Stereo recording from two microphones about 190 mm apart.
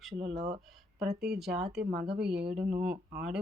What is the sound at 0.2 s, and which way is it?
Speech, 35° right (ahead or behind).